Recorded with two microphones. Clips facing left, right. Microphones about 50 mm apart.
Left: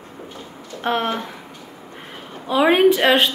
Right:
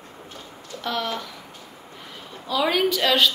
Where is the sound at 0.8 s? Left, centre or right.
Left.